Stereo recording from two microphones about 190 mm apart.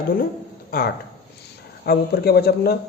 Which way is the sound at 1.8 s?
55° left (ahead or behind).